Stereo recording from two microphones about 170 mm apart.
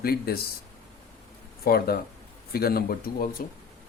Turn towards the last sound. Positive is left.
turn(degrees=60)  # may be behind; listen again after turning